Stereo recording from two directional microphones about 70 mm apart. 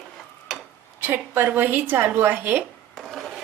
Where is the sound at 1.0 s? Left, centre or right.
Right.